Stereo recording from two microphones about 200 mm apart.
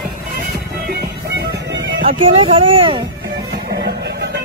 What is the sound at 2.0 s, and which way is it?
Speech, 30° right (ahead or behind).